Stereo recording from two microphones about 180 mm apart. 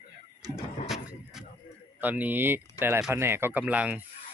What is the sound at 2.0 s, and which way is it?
Speech, 10° right (ahead or behind).